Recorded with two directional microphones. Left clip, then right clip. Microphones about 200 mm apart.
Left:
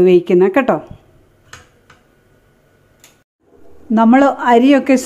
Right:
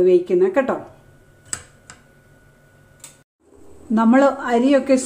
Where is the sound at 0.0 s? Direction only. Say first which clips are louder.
Left 5 dB; 45° left (ahead or behind).